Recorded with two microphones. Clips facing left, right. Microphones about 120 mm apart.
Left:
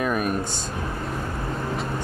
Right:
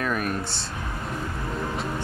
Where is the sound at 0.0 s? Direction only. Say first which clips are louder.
Left 3 dB; 15° left (ahead or behind).